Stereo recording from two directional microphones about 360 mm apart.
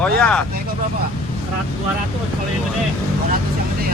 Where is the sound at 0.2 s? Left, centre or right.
Centre.